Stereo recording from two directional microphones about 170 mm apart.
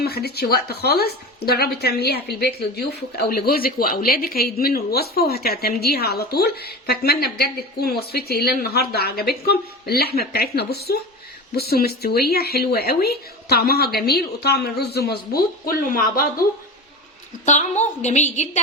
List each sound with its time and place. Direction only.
0.0 s speech: 70° left (ahead or behind)
17.4 s a woman's voice: 45° left (ahead or behind)